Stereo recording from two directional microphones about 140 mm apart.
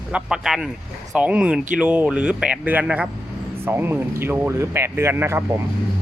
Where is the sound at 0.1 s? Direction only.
5° right (ahead or behind).